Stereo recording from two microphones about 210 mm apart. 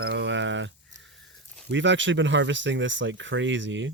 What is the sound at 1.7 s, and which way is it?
Speech, 60° right (ahead or behind).